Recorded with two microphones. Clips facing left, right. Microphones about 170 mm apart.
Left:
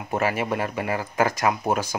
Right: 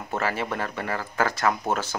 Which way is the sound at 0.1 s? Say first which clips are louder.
Left 4 dB; 15° left (ahead or behind).